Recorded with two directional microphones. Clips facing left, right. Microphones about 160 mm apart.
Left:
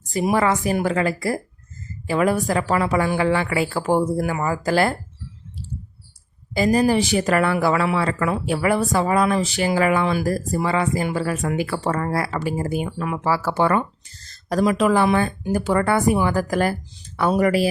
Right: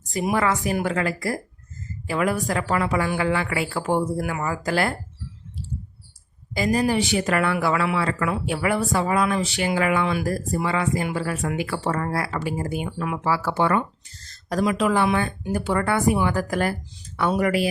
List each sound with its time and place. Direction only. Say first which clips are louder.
0.1 s a woman's voice: left 3 dB; 30° left (ahead or behind)
6.5 s speech: left 4 dB; 35° left (ahead or behind)